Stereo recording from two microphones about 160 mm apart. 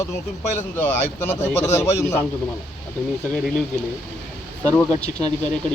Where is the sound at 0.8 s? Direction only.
10° left (ahead or behind).